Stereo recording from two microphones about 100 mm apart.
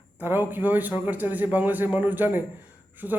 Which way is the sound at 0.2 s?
20° right (ahead or behind).